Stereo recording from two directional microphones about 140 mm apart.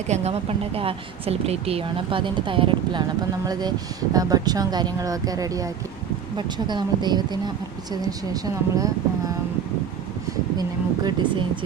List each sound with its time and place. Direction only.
0.1 s a woman's voice: 50° right (ahead or behind); by 8.9 s 25° right (ahead or behind)
10.6 s a woman's voice: 30° right (ahead or behind)